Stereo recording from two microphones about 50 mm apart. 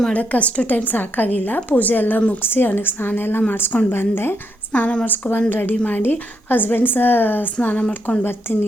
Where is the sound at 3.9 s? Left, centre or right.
Left.